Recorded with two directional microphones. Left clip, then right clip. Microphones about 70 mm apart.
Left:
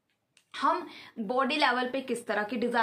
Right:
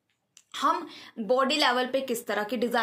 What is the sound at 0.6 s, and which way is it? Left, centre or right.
A woman's voice, left.